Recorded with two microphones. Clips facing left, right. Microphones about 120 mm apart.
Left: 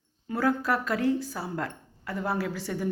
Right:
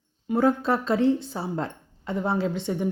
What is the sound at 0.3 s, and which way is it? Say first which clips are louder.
Speech: right 4 dB; 25° right (ahead or behind).